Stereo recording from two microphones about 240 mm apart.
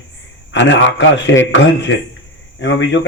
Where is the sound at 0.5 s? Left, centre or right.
Left.